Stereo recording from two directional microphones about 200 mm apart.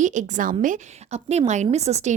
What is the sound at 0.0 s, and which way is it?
A woman's voice, 40° right (ahead or behind).